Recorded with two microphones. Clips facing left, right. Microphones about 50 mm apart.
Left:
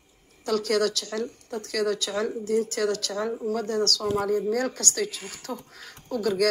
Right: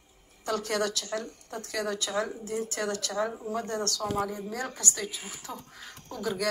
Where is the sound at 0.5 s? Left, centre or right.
Right.